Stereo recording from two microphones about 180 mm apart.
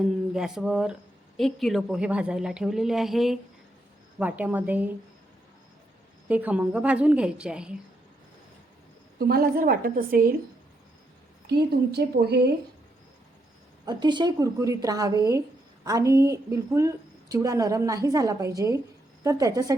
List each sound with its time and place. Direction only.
0.0 s a woman's voice: centre (ahead or behind)
6.2 s a woman's voice: 10° right (ahead or behind)
9.1 s a woman's voice: 55° right (ahead or behind)
11.4 s a woman's voice: 65° right (ahead or behind)
13.8 s a woman's voice: 25° right (ahead or behind)